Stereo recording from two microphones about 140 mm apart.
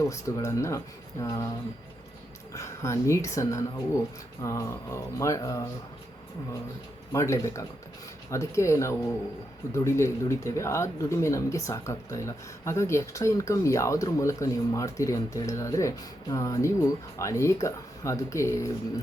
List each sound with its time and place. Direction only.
0.0 s speech: 20° left (ahead or behind)
2.6 s speech: 20° left (ahead or behind)
7.1 s speech: 20° left (ahead or behind)